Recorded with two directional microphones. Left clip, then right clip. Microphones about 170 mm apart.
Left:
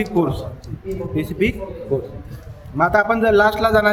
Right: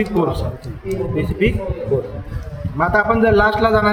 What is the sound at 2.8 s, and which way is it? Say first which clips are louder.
Speech: right 1 dB; 90° left.